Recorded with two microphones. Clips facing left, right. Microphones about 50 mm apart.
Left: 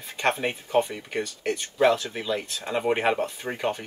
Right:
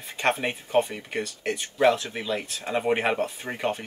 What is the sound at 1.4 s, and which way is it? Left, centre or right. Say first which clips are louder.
Speech: even; centre.